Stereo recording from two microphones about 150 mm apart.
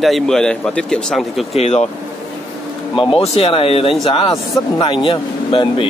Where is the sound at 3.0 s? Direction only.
35° left (ahead or behind).